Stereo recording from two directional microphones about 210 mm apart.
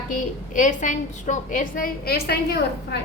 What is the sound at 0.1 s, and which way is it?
A woman's voice, 40° left (ahead or behind).